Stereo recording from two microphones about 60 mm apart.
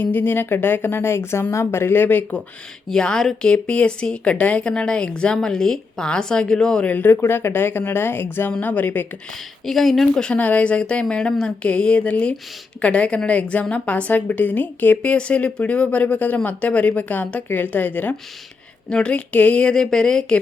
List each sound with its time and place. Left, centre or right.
0.0 s speech: left
2.9 s a woman's voice: centre
6.8 s a woman's voice: left
7.2 s a woman's voice: left
9.6 s speech: centre
10.3 s a woman's voice: left
18.9 s a woman's voice: centre